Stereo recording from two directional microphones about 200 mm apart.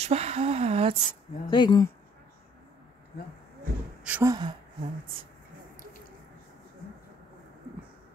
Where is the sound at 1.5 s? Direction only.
20° left (ahead or behind).